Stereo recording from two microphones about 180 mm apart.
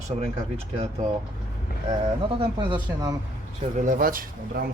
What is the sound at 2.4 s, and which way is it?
Speech, 25° right (ahead or behind).